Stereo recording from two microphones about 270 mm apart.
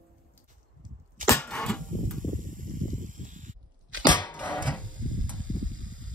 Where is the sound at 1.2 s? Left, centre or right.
Centre.